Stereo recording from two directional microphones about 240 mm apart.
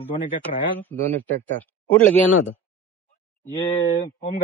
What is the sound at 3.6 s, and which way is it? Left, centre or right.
Speech, left.